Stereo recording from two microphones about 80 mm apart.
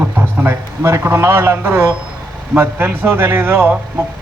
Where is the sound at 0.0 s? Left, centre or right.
Right.